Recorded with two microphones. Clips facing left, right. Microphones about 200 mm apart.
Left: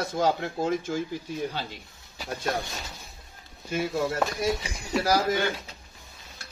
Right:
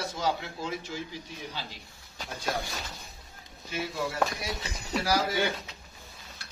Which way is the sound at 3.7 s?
45° left (ahead or behind).